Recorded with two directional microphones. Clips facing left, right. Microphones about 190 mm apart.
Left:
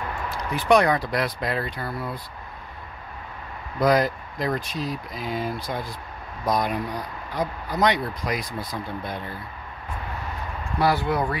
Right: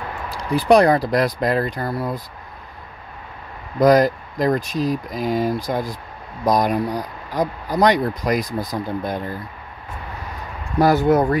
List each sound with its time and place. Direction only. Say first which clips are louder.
0.3 s speech: right 5 dB; 35° right (ahead or behind)
3.8 s speech: right 6 dB; 40° right (ahead or behind)
10.8 s speech: right 7 dB; 45° right (ahead or behind)